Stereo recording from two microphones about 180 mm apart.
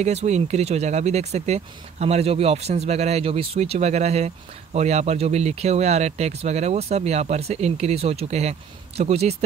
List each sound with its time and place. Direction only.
0.0 s speech: 40° right (ahead or behind)